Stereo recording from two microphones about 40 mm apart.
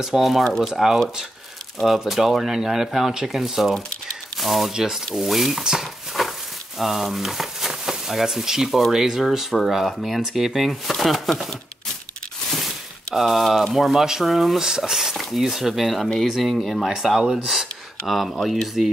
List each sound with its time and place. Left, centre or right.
0.0 s speech: centre
0.3 s speech: centre
5.6 s speech: centre
6.2 s a sound: centre
6.8 s speech: centre
12.4 s a sound: centre
13.7 s speech: centre